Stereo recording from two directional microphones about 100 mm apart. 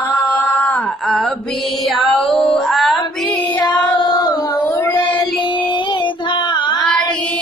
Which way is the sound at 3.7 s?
45° left (ahead or behind).